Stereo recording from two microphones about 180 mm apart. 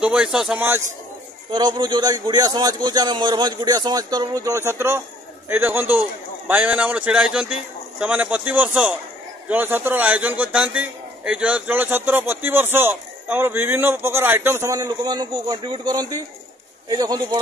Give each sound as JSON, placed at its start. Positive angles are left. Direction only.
{"t": 0.0, "sound": "speech", "side_deg": -5}
{"t": 1.5, "sound": "a man's voice", "side_deg": -25}